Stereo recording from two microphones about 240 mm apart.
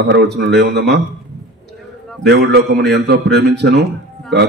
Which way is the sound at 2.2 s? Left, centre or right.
Right.